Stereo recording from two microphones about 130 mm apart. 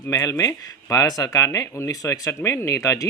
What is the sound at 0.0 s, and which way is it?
Speech, 25° left (ahead or behind).